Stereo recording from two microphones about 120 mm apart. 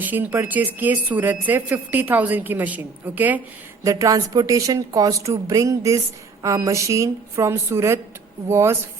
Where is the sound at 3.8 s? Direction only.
30° right (ahead or behind).